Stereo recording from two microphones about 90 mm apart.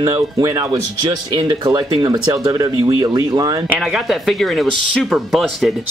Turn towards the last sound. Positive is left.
turn(degrees=0)  # may be behind; listen again after turning